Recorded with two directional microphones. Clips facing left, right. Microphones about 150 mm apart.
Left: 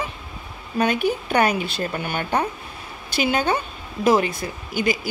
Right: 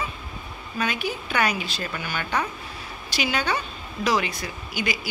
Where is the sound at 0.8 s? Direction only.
55° left (ahead or behind).